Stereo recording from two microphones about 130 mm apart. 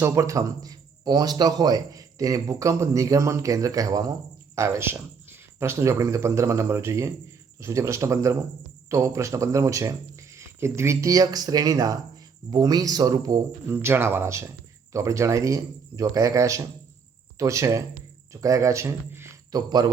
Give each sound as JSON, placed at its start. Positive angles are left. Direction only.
{"t": 0.0, "sound": "a man's voice", "side_deg": -20}
{"t": 13.8, "sound": "a man's voice", "side_deg": -20}
{"t": 19.5, "sound": "speech", "side_deg": -30}